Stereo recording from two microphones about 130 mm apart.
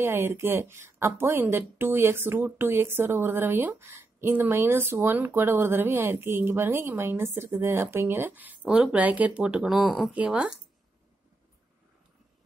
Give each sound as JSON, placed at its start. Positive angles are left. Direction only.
{"t": 0.0, "sound": "a woman's voice", "side_deg": -15}